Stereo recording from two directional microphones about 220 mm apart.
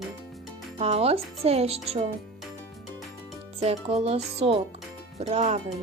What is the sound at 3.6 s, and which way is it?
Speech, 25° right (ahead or behind).